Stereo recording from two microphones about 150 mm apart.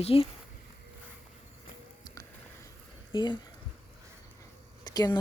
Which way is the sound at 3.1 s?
30° left (ahead or behind).